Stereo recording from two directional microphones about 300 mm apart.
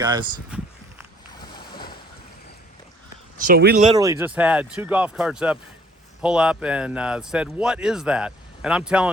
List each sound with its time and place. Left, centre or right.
0.0 s a sound: centre
1.4 s boat: centre
3.3 s speech: right
3.9 s speech: centre